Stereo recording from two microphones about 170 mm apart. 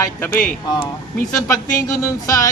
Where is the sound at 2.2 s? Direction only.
20° left (ahead or behind).